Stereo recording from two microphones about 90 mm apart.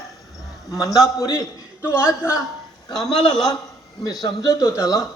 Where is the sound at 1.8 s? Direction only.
25° left (ahead or behind).